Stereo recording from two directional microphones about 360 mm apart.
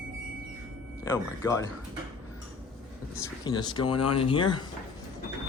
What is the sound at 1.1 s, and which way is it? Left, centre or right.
Speech, centre.